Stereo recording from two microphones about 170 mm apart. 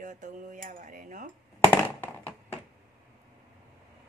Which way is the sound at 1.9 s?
10° left (ahead or behind).